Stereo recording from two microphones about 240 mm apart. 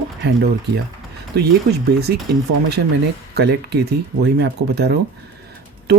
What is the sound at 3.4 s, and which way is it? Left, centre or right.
Speech, right.